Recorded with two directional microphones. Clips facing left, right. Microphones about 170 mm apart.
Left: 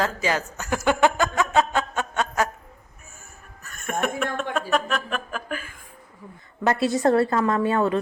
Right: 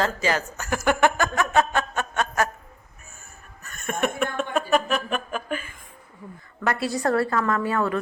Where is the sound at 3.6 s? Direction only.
Centre (ahead or behind).